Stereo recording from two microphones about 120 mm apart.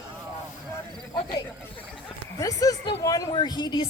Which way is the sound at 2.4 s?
30° left (ahead or behind).